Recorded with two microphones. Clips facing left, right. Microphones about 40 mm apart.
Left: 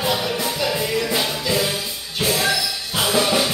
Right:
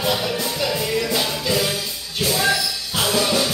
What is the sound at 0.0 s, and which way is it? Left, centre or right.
Music, centre.